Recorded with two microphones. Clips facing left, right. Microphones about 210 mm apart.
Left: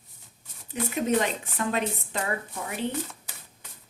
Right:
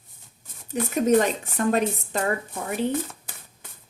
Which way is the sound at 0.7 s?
45° right (ahead or behind).